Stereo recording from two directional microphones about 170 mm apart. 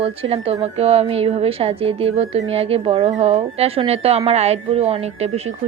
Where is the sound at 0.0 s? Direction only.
35° right (ahead or behind).